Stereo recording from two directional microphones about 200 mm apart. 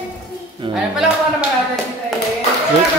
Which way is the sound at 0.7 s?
5° right (ahead or behind).